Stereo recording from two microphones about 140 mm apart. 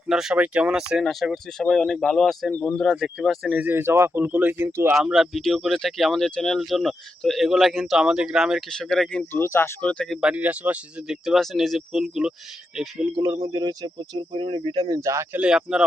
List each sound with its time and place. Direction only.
0.1 s speech: 5° right (ahead or behind)
2.9 s speech: 5° right (ahead or behind)
4.9 s speech: centre (ahead or behind)
9.3 s speech: 15° left (ahead or behind)
10.2 s speech: 10° right (ahead or behind)
13.1 s speech: 20° right (ahead or behind)
15.4 s speech: 5° right (ahead or behind)